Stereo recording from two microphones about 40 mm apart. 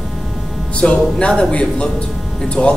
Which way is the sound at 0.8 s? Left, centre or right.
Left.